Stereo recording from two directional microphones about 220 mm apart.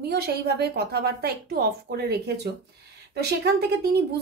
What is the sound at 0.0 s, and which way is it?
A woman's voice, 45° right (ahead or behind).